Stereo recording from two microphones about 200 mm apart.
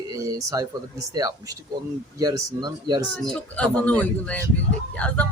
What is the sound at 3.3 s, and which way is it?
A woman's voice, 5° left (ahead or behind).